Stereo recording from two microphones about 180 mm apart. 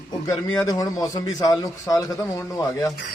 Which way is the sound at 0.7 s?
20° left (ahead or behind).